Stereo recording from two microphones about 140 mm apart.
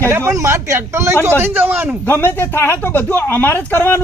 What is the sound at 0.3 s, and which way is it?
A man's voice, 20° right (ahead or behind).